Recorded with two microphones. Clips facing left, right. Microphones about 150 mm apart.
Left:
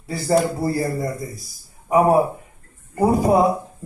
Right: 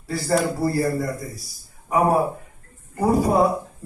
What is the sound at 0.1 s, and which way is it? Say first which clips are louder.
A woman's voice: left 3 dB; 20° left (ahead or behind).